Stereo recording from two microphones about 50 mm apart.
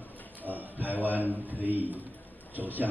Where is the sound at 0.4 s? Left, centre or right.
Right.